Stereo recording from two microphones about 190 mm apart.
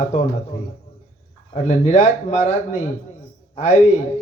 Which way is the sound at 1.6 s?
35° left (ahead or behind).